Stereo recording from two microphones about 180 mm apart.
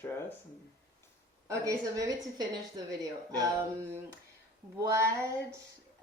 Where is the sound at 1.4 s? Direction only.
15° right (ahead or behind).